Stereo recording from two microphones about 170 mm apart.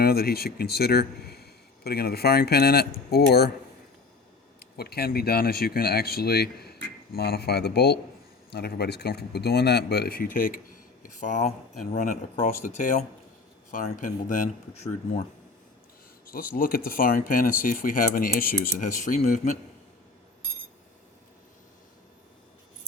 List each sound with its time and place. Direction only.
0.0 s speech: 65° left (ahead or behind)
4.6 s speech: 65° left (ahead or behind)
10.3 s speech: 55° left (ahead or behind); by 15.2 s 40° left (ahead or behind)
16.2 s speech: 60° left (ahead or behind)